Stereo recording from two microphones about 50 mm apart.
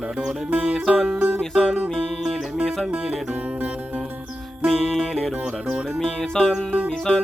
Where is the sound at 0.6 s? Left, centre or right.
Centre.